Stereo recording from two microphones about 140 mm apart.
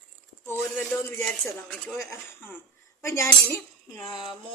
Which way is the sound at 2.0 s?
20° left (ahead or behind).